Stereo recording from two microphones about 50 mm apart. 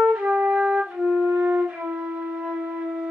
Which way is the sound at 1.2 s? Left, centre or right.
Right.